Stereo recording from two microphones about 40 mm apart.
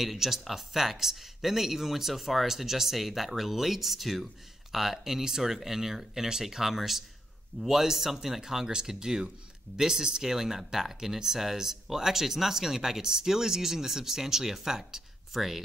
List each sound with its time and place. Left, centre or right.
0.0 s speech: centre